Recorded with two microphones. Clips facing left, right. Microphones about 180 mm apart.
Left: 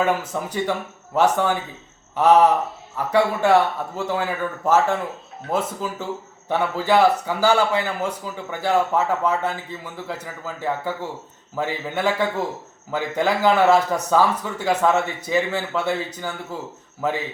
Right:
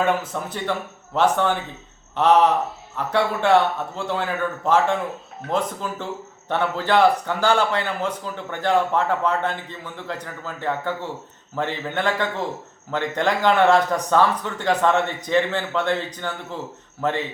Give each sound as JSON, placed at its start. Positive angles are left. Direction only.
{"t": 0.3, "sound": "a man's voice", "side_deg": 10}